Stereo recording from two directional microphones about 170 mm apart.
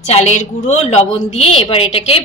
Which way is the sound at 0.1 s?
40° left (ahead or behind).